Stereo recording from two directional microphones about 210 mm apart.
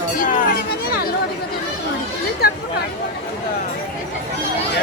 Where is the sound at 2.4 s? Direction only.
50° left (ahead or behind).